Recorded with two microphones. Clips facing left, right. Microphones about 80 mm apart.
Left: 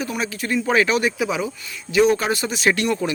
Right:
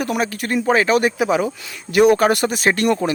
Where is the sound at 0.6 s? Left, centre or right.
Right.